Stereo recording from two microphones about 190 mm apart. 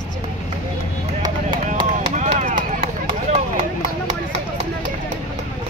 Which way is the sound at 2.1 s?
40° right (ahead or behind).